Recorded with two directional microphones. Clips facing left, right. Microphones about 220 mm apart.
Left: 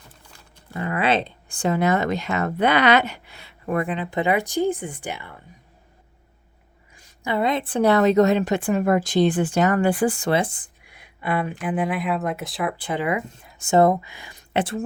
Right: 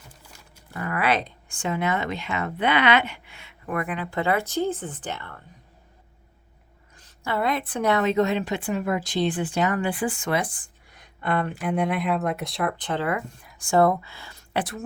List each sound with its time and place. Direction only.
0.7 s speech: 25° left (ahead or behind)
6.9 s a woman's voice: 15° left (ahead or behind)
10.8 s speech: 10° left (ahead or behind)